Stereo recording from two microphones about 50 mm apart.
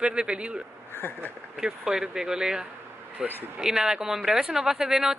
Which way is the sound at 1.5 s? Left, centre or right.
Centre.